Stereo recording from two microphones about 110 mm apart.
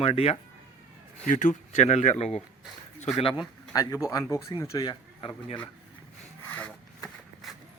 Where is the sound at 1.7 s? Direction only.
90° left.